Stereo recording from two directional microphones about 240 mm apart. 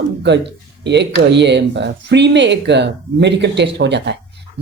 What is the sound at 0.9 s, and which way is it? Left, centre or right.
Speech, right.